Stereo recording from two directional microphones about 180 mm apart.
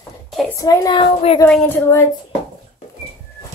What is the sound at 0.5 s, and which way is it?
A child's voice, 20° left (ahead or behind).